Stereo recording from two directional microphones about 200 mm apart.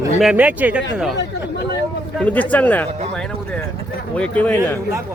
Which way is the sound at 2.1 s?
5° left (ahead or behind).